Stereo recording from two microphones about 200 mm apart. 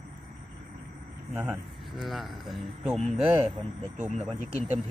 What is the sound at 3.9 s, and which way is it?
Speech, 35° right (ahead or behind).